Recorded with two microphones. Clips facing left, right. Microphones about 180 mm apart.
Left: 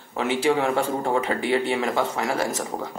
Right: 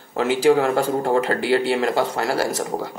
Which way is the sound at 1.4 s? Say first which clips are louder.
Right 3 dB; 90° right.